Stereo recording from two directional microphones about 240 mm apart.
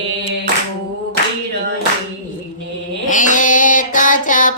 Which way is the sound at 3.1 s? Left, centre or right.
Left.